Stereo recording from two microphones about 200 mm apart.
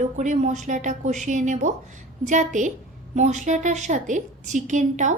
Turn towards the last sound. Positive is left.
turn(degrees=-35)  # may be behind; listen again after turning